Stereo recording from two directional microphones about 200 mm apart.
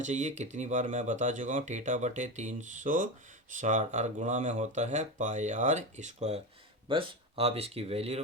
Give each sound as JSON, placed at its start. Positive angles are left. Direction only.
{"t": 0.0, "sound": "speech", "side_deg": -35}